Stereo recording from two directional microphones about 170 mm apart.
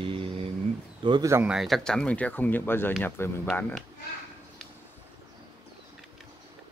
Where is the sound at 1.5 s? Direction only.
Centre (ahead or behind).